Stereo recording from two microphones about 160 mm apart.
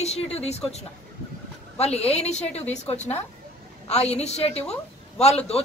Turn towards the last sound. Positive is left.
turn(degrees=40)  # may be behind; listen again after turning